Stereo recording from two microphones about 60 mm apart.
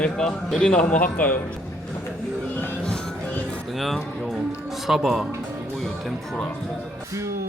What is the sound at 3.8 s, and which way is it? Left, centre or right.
Speech, centre.